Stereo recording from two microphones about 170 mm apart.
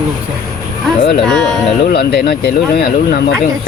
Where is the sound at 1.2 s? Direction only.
5° left (ahead or behind).